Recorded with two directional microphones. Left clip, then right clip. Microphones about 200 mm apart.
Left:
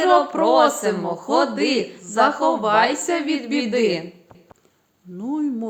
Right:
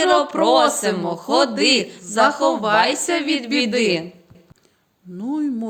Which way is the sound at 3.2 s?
45° right (ahead or behind).